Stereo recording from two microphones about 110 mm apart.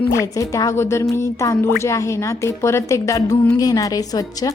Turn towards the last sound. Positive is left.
turn(degrees=35)  # may be behind; listen again after turning